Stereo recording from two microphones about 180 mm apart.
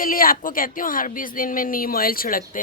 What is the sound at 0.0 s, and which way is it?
Speech, 50° left (ahead or behind).